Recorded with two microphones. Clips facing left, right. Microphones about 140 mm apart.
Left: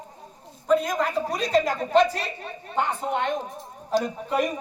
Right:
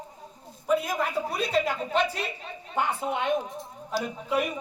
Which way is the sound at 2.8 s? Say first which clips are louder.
Left 2 dB; 10° right (ahead or behind).